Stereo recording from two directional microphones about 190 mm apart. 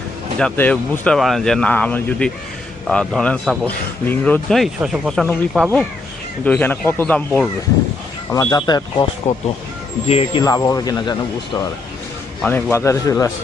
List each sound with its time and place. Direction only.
0.3 s speech: 10° left (ahead or behind)
9.2 s speech: 35° left (ahead or behind)
10.4 s speech: 20° left (ahead or behind)
12.4 s speech: 5° left (ahead or behind)